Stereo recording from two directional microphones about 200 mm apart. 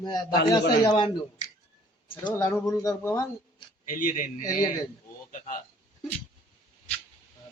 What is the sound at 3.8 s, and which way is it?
Speech, 40° left (ahead or behind).